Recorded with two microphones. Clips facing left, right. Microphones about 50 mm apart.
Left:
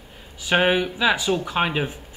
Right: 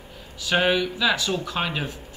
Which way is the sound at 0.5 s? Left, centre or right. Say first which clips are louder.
Left 2 dB; left.